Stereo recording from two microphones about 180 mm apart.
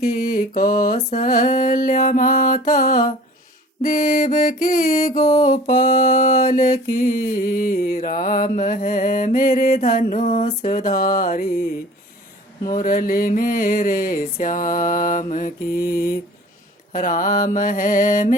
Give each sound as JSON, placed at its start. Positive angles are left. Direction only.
{"t": 0.0, "sound": "mantra", "side_deg": 55}
{"t": 5.2, "sound": "mantra", "side_deg": 20}
{"t": 5.5, "sound": "mantra", "side_deg": 50}
{"t": 12.6, "sound": "mantra", "side_deg": 50}